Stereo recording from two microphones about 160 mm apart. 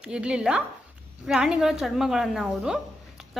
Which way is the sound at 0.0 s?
5° right (ahead or behind).